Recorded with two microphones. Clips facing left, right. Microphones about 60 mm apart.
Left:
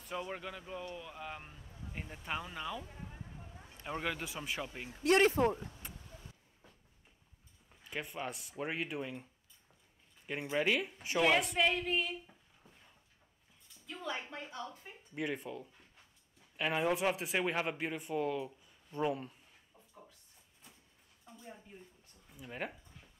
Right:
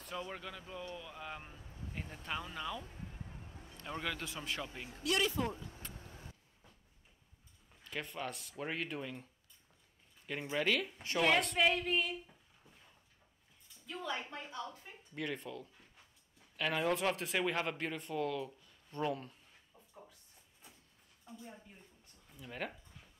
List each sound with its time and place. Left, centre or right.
0.1 s speech: centre
4.8 s speech: left
7.8 s speech: centre
13.8 s speech: centre
22.3 s speech: centre